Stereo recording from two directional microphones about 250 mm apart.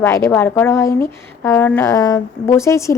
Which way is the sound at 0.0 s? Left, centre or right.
Centre.